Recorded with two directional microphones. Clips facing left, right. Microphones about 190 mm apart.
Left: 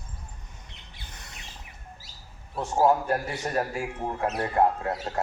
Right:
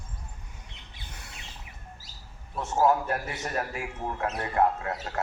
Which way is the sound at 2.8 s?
30° left (ahead or behind).